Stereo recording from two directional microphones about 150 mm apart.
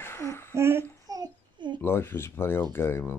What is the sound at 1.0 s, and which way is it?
Child singing, 25° right (ahead or behind).